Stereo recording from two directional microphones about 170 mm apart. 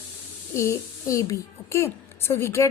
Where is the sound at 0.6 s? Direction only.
15° left (ahead or behind).